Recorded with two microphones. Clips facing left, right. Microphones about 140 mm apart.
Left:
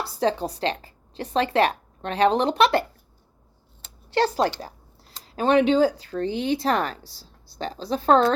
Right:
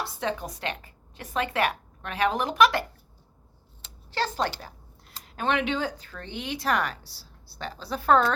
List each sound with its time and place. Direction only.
0.0 s a woman's voice: 35° left (ahead or behind)
3.8 s a sound: 35° left (ahead or behind)
4.6 s a woman's voice: 30° left (ahead or behind)